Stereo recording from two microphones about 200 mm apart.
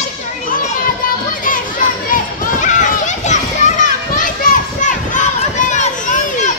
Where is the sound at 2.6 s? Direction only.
40° left (ahead or behind).